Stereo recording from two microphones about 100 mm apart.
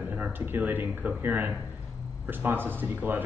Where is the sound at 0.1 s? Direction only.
15° right (ahead or behind).